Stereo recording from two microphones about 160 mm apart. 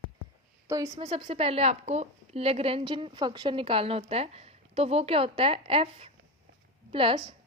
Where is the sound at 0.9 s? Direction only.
35° right (ahead or behind).